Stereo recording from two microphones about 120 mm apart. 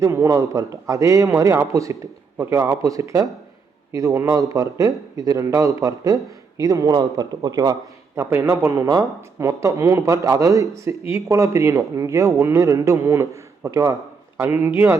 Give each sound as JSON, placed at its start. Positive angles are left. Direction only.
{"t": 0.0, "sound": "a man's voice", "side_deg": -25}